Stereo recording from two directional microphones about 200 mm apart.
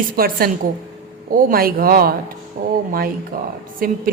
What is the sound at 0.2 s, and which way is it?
A woman's voice, 45° right (ahead or behind).